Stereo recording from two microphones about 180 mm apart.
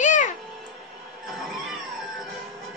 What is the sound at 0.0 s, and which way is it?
Music, 45° left (ahead or behind).